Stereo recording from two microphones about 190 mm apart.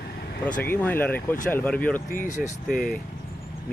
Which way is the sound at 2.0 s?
45° left (ahead or behind).